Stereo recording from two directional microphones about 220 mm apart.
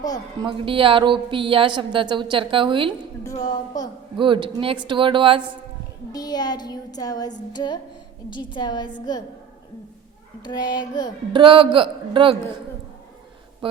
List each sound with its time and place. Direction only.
0.4 s a woman's voice: 25° right (ahead or behind)
3.2 s a woman's voice: 15° left (ahead or behind)
4.2 s a woman's voice: 20° right (ahead or behind)
6.1 s a woman's voice: 15° left (ahead or behind)
10.4 s speech: 20° left (ahead or behind)
11.3 s a woman's voice: 25° right (ahead or behind)